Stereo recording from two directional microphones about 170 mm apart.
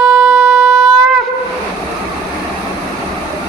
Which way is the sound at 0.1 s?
5° right (ahead or behind).